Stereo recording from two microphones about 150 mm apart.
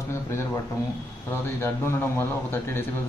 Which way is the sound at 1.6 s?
15° left (ahead or behind).